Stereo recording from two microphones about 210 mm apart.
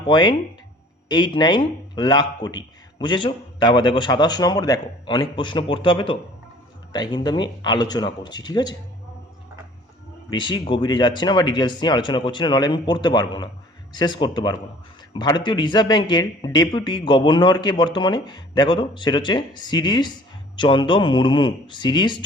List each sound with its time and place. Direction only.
0.1 s speech: 20° left (ahead or behind)
10.2 s speech: 20° left (ahead or behind)